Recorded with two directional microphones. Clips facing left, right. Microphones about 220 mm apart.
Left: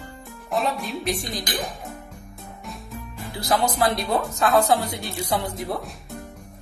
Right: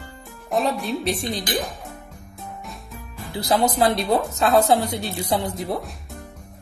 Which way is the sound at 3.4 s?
20° right (ahead or behind).